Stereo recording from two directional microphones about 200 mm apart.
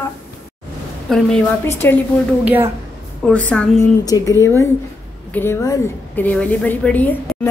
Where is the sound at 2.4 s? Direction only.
10° right (ahead or behind).